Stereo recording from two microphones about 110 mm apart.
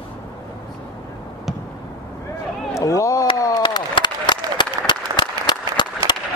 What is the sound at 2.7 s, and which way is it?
Chop, 30° left (ahead or behind).